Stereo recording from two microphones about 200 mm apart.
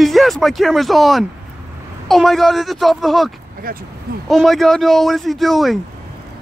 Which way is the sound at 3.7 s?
45° right (ahead or behind).